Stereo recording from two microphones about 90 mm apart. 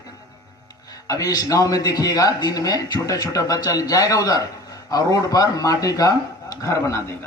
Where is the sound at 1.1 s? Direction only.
40° left (ahead or behind).